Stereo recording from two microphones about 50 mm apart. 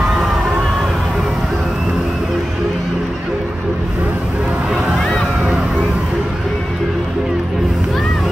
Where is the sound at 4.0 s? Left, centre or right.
Right.